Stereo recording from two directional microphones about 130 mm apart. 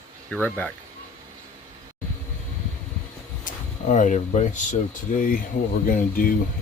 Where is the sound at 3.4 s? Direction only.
75° left (ahead or behind).